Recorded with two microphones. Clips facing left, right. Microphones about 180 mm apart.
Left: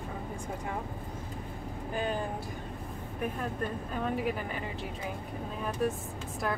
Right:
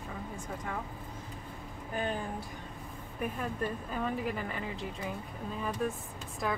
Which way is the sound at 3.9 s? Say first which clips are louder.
Left 2 dB; centre (ahead or behind).